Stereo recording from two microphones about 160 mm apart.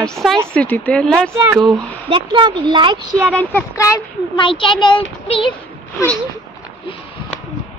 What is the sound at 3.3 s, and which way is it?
Speech, 15° left (ahead or behind).